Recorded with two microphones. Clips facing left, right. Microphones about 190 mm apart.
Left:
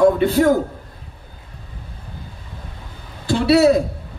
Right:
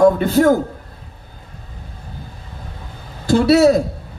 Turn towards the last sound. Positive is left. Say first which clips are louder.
# right 2 dB
turn(degrees=-45)  # may be behind; listen again after turning